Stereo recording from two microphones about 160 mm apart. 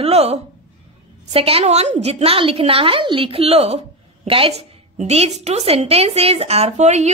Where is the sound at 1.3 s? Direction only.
35° right (ahead or behind).